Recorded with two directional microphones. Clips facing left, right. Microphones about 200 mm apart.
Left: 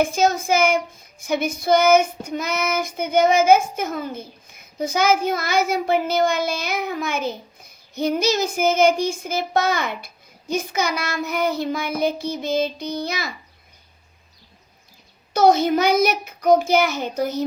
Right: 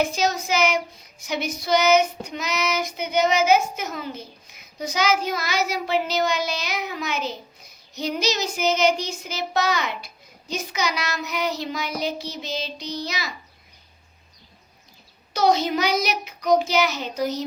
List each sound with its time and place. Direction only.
0.0 s child singing: 50° left (ahead or behind)
15.3 s child singing: 50° left (ahead or behind)